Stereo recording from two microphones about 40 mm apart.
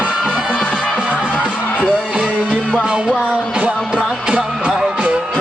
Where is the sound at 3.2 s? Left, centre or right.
Right.